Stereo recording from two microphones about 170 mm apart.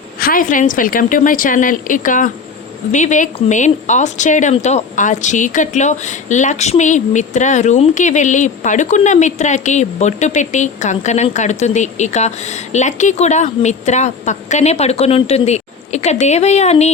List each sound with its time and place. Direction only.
0.2 s a woman's voice: 55° left (ahead or behind); by 16.9 s 40° left (ahead or behind)